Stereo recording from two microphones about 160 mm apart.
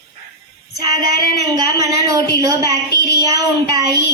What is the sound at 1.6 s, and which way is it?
A woman's voice, 25° right (ahead or behind).